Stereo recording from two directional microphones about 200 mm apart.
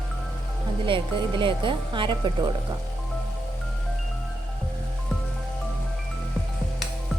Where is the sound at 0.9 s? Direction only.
25° right (ahead or behind).